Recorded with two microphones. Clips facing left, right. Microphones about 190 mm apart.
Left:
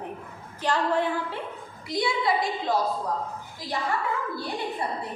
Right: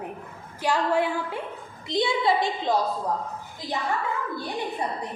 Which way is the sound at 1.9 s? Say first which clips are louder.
Right 2 dB; 25° right (ahead or behind).